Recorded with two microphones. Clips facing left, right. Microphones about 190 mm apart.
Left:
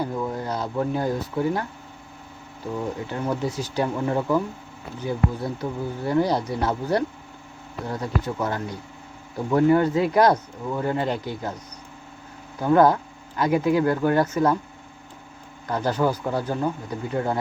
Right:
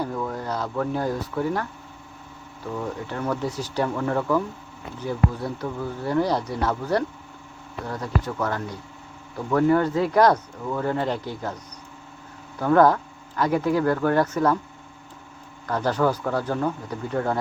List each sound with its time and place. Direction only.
0.0 s speech: 15° left (ahead or behind)
2.7 s speech: 15° left (ahead or behind)
12.5 s speech: 15° left (ahead or behind)
15.6 s speech: 15° left (ahead or behind)